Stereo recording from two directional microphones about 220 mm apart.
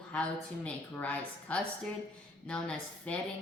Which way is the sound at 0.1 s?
5° left (ahead or behind).